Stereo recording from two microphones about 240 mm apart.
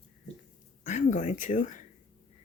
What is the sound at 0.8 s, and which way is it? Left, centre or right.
Speech, left.